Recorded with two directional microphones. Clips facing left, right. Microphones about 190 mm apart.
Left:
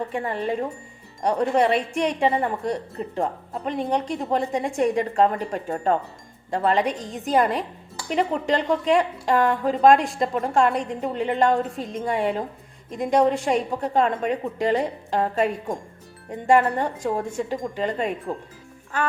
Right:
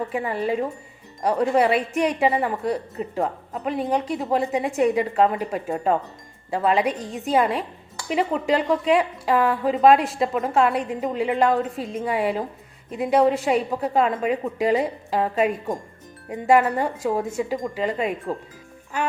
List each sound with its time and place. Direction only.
0.1 s a woman's voice: 5° right (ahead or behind)